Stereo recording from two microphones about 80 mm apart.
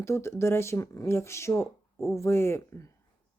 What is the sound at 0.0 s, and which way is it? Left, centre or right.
Speech, left.